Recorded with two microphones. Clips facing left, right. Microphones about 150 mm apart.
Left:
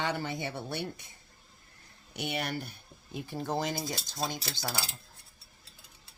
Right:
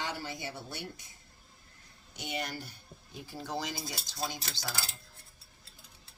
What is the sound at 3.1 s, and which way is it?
Speech, 50° left (ahead or behind).